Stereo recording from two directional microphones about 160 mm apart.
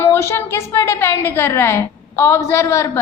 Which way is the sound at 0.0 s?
15° left (ahead or behind).